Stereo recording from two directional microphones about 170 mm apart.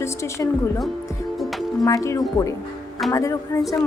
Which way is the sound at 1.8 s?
20° left (ahead or behind).